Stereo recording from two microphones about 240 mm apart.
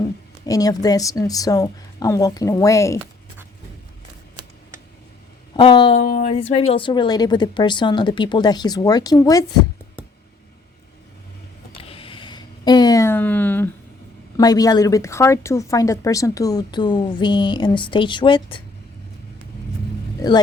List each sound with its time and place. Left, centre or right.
0.4 s a woman's voice: centre
5.5 s speech: centre
11.8 s a sound: left; by 13.7 s centre
14.3 s a woman's voice: centre